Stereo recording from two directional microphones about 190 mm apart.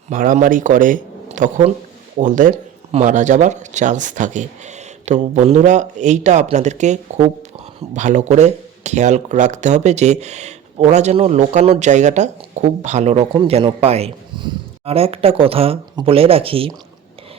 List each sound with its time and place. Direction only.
0.1 s speech: 45° right (ahead or behind)